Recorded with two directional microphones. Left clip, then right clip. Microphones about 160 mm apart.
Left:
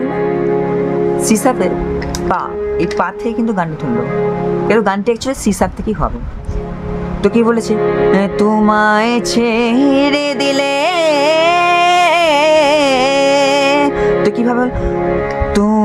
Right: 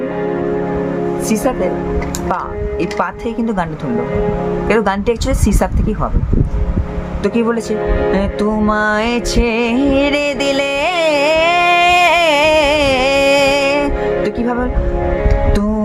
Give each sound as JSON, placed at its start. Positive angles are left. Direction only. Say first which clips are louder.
{"t": 1.2, "sound": "a woman's voice", "louder": "left 1 dB", "side_deg": 35}
{"t": 2.3, "sound": "speech", "louder": "left 4 dB", "side_deg": 20}
{"t": 4.7, "sound": "speech", "louder": "left 1 dB", "side_deg": 15}
{"t": 7.2, "sound": "music", "louder": "left 4 dB", "side_deg": 25}